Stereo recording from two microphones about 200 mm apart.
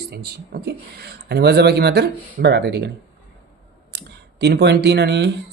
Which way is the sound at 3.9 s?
55° right (ahead or behind).